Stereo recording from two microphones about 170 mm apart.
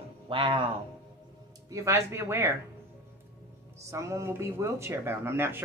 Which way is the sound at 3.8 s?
20° right (ahead or behind).